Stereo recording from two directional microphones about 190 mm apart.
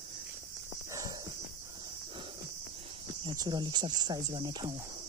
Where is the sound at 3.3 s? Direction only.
20° right (ahead or behind).